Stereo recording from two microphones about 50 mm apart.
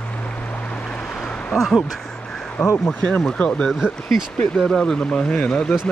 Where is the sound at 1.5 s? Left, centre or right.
Centre.